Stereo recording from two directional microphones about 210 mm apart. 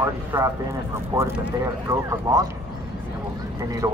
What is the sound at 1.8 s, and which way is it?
Speech, 15° right (ahead or behind).